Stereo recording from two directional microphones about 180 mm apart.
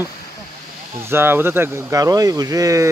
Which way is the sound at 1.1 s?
10° right (ahead or behind).